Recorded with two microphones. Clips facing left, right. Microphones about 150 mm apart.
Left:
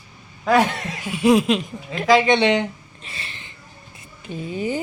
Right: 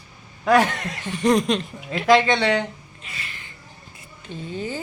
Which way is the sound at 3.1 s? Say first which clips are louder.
Left 1 dB; 30° left (ahead or behind).